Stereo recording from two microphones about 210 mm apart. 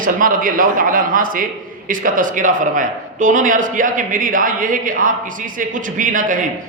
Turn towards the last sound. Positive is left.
turn(degrees=-40)  # may be behind; listen again after turning